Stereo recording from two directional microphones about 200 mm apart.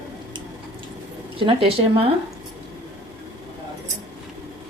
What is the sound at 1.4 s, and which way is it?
Speech, 25° right (ahead or behind).